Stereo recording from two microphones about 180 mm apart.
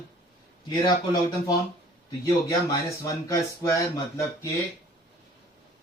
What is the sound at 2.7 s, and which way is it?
Speech, 20° left (ahead or behind).